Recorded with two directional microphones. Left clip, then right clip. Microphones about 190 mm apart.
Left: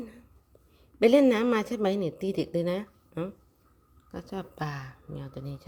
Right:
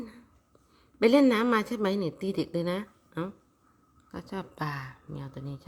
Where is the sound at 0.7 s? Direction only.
5° left (ahead or behind).